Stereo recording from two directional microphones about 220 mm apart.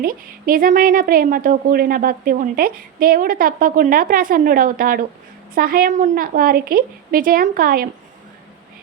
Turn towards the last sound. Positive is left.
turn(degrees=-40)  # may be behind; listen again after turning